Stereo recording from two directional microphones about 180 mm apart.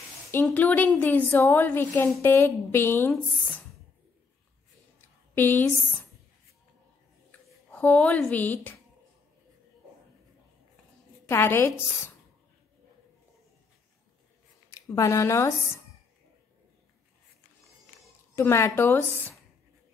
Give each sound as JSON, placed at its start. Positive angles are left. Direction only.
{"t": 0.3, "sound": "a woman's voice", "side_deg": 10}
{"t": 5.3, "sound": "speech", "side_deg": 10}
{"t": 7.2, "sound": "speech", "side_deg": 5}
{"t": 11.2, "sound": "a woman's voice", "side_deg": 15}
{"t": 14.7, "sound": "speech", "side_deg": 20}
{"t": 18.3, "sound": "a woman's voice", "side_deg": 15}